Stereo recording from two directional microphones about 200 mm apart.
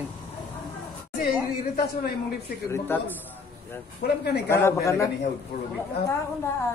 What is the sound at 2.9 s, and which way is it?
Speech, 10° left (ahead or behind).